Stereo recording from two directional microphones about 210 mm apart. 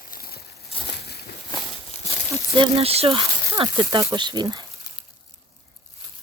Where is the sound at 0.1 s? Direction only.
45° left (ahead or behind).